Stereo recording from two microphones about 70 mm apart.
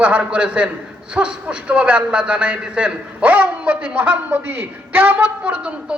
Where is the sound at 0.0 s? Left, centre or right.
Centre.